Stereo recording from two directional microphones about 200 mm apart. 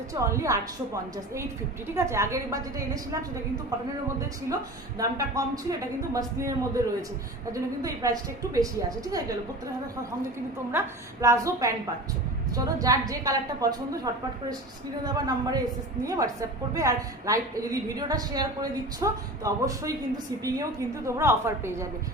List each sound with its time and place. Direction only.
0.1 s a woman's voice: 15° right (ahead or behind)
2.0 s a woman's voice: 15° right (ahead or behind)
4.9 s a woman's voice: 15° right (ahead or behind)
10.7 s a woman's voice: 15° right (ahead or behind)